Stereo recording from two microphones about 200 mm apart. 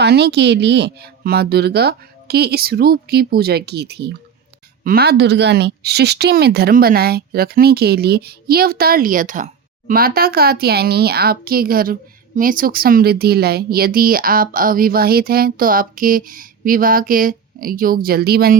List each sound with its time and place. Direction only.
0.0 s speech: 55° right (ahead or behind)